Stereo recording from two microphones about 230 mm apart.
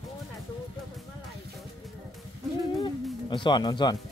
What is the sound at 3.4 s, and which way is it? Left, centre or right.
Speech, centre.